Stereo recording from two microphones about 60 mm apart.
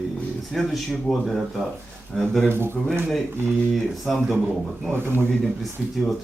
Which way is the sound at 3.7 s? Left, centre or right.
Centre.